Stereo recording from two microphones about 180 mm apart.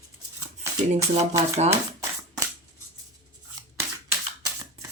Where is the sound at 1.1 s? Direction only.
35° right (ahead or behind).